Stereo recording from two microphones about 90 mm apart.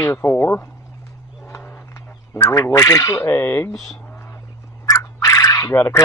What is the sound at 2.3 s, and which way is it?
Speech, 40° left (ahead or behind).